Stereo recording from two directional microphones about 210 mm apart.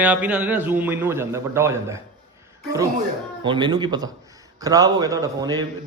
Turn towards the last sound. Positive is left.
turn(degrees=-20)  # may be behind; listen again after turning